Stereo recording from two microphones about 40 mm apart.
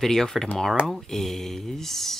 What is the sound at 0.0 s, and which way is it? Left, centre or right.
Speech, centre.